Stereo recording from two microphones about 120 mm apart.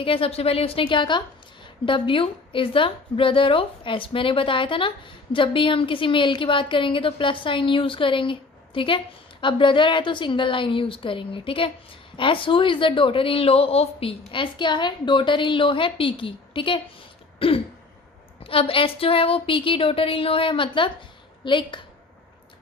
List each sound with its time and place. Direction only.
0.0 s a woman's voice: 50° left (ahead or behind)